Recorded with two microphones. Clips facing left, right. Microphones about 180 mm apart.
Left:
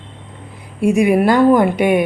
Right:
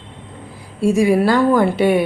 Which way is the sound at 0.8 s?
20° left (ahead or behind).